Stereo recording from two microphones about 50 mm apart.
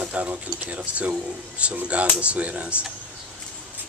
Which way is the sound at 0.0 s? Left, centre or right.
Right.